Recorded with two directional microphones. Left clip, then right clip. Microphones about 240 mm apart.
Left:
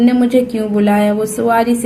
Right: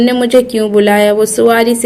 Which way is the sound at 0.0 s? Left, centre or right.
Right.